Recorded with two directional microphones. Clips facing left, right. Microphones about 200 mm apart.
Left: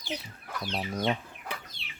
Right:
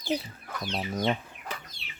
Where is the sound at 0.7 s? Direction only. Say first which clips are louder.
Right 1 dB; centre (ahead or behind).